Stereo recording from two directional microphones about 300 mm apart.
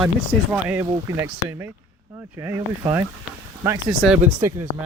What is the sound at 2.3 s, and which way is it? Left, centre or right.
Speech, centre.